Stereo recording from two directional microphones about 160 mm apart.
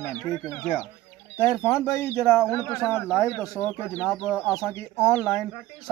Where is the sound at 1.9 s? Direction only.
20° left (ahead or behind).